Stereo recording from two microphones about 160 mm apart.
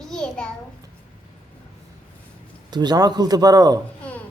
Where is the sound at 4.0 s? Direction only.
10° left (ahead or behind).